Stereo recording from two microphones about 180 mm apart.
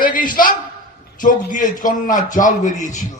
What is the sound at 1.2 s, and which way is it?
A man's voice, 50° left (ahead or behind).